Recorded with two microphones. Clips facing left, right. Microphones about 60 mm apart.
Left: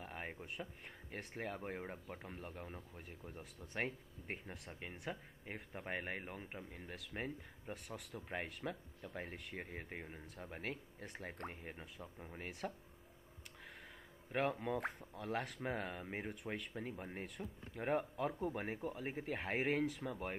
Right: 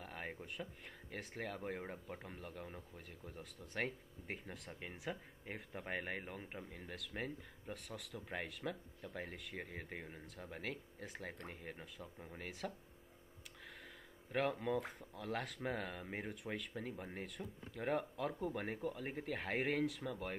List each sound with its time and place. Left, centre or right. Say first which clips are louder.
0.0 s speech: even; centre
12.6 s speech: left 1 dB; centre
14.3 s speech: right 1 dB; centre
17.8 s speech: left 1 dB; centre